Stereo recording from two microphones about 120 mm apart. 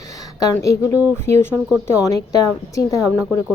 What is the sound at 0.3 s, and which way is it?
A woman's voice, 25° left (ahead or behind).